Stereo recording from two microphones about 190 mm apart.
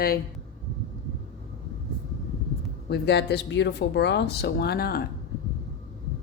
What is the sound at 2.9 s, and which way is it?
Speech, 60° left (ahead or behind).